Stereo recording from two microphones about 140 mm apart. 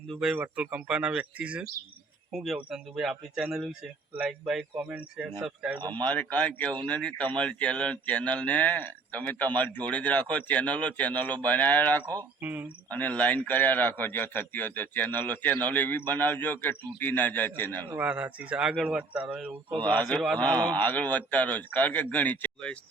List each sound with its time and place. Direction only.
0.1 s speech: 5° right (ahead or behind)
5.9 s a man's voice: 10° left (ahead or behind)
12.4 s speech: 15° right (ahead or behind)
12.9 s a man's voice: 10° left (ahead or behind)
17.9 s speech: 10° right (ahead or behind)
20.3 s a man's voice: 10° left (ahead or behind)